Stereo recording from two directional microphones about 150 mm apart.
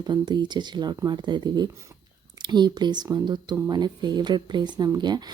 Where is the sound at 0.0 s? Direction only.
30° right (ahead or behind).